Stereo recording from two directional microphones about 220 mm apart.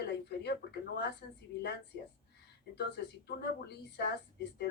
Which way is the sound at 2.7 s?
50° left (ahead or behind).